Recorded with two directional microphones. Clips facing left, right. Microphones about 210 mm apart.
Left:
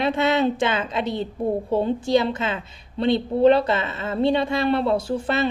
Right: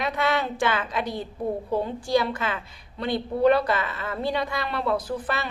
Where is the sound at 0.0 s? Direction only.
25° left (ahead or behind).